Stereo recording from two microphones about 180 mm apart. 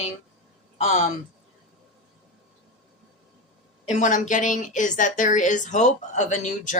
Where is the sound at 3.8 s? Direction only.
40° left (ahead or behind).